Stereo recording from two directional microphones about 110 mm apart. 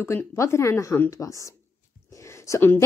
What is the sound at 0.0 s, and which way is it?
A woman's voice, 20° left (ahead or behind).